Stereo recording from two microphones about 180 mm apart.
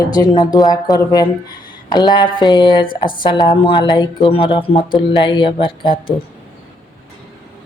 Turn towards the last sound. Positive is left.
turn(degrees=30)  # may be behind; listen again after turning